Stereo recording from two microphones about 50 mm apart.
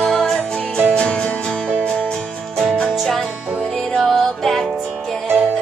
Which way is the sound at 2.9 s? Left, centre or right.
Centre.